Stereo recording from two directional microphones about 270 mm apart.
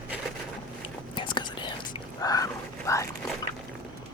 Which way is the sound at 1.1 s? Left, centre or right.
Centre.